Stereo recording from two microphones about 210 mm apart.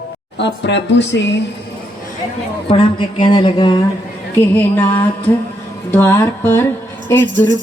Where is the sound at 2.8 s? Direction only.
25° left (ahead or behind).